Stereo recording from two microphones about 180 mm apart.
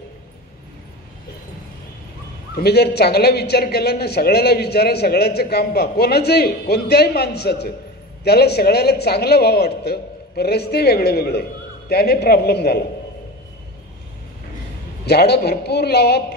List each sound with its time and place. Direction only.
2.5 s a man's voice: 65° left (ahead or behind)
15.0 s a man's voice: 65° left (ahead or behind)